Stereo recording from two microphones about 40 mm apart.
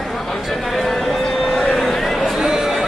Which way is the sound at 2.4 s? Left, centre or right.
Centre.